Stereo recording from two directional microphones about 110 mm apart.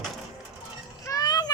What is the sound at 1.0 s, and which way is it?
Children playing, 35° left (ahead or behind).